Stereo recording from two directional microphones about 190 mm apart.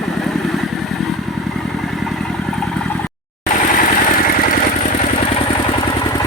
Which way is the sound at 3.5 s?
45° left (ahead or behind).